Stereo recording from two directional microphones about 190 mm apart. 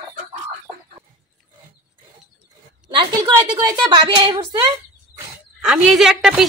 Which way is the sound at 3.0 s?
20° right (ahead or behind).